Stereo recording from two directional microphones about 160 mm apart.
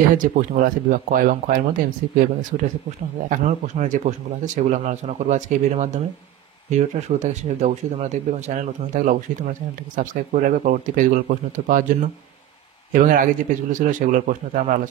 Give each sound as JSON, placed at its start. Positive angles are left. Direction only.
{"t": 0.1, "sound": "speech", "side_deg": -55}
{"t": 12.9, "sound": "speech", "side_deg": -60}